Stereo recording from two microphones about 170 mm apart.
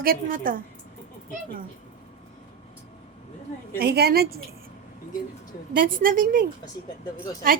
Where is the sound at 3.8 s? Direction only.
65° right (ahead or behind).